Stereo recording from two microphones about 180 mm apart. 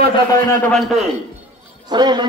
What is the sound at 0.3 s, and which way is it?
Speech, 10° left (ahead or behind).